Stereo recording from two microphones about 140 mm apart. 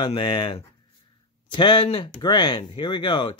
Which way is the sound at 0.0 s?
35° left (ahead or behind).